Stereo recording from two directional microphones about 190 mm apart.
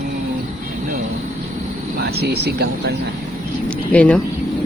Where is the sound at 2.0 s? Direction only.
55° right (ahead or behind).